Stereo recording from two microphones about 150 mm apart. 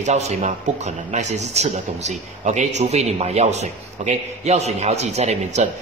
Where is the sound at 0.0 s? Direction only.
50° right (ahead or behind).